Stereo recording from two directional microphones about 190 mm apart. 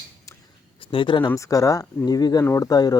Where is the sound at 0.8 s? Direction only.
25° left (ahead or behind).